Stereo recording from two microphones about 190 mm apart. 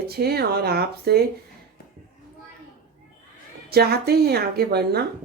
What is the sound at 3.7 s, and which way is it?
Speech, 55° right (ahead or behind).